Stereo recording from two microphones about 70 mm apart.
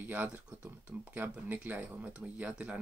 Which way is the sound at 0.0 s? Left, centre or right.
Right.